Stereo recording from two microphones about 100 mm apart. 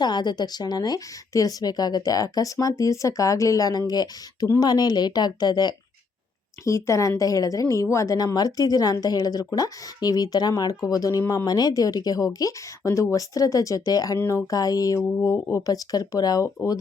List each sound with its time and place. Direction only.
0.0 s a woman's voice: 45° left (ahead or behind)
6.7 s a woman's voice: 30° left (ahead or behind)
14.2 s speech: 20° left (ahead or behind)
14.5 s a woman's voice: 35° left (ahead or behind)